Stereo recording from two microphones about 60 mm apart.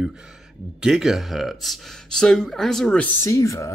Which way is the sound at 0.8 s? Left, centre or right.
Centre.